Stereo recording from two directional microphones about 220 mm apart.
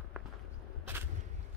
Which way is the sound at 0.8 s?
10° right (ahead or behind).